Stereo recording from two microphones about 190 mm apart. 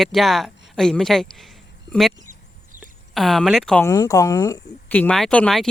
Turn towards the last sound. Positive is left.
turn(degrees=0)  # may be behind; listen again after turning